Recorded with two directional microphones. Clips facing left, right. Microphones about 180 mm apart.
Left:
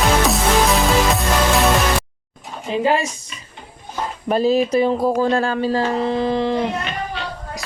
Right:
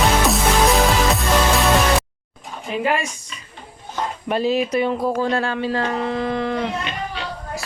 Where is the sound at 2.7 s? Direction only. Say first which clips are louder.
Left 3 dB; 30° left (ahead or behind).